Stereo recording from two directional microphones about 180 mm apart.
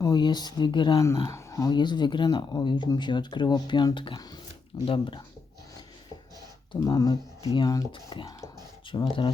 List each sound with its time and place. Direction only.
0.0 s speech: 25° left (ahead or behind)
6.7 s speech: 20° left (ahead or behind)